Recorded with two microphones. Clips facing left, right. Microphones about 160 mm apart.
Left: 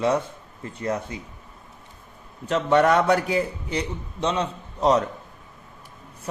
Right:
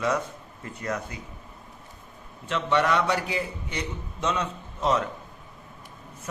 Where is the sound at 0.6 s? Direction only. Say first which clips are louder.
Left 4 dB; 30° left (ahead or behind).